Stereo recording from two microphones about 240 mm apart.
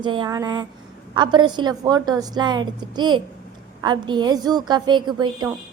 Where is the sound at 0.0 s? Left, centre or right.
Centre.